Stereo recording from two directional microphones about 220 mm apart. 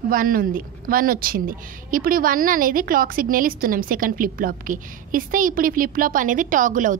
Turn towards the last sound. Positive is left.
turn(degrees=-35)  # may be behind; listen again after turning